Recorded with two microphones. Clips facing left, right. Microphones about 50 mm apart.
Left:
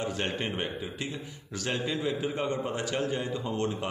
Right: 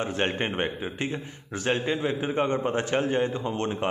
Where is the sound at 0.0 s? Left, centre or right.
Right.